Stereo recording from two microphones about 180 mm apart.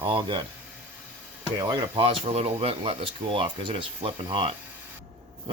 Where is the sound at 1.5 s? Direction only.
25° right (ahead or behind).